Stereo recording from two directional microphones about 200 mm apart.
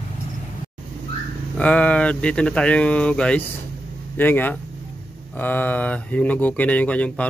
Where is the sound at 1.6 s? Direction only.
5° left (ahead or behind).